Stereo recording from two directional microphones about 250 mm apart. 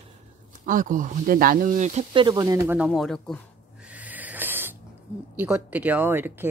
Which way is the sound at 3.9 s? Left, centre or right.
Centre.